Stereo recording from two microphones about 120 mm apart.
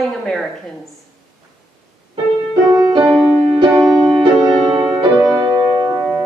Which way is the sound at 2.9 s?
10° right (ahead or behind).